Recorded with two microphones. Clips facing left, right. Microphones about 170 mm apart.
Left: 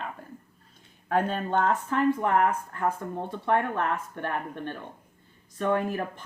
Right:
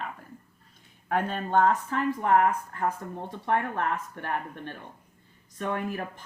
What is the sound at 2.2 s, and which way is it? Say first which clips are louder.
Speech: right 1 dB; 50° left (ahead or behind).